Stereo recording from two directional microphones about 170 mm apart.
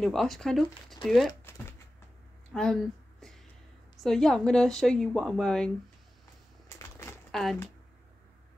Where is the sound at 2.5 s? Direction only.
5° left (ahead or behind).